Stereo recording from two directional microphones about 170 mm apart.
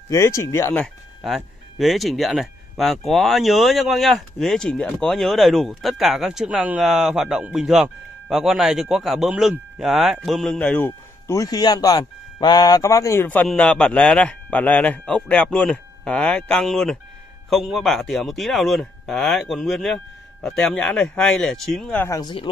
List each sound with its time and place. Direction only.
0.1 s speech: 15° left (ahead or behind)
1.2 s speech: centre (ahead or behind)
22.2 s speech: 30° left (ahead or behind)